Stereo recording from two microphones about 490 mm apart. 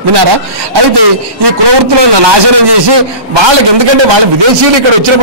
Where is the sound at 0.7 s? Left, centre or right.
Right.